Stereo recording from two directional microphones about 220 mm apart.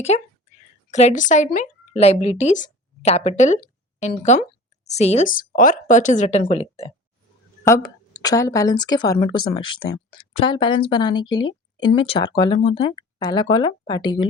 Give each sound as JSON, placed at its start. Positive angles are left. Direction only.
{"t": 0.1, "sound": "speech", "side_deg": 30}
{"t": 7.6, "sound": "speech", "side_deg": 15}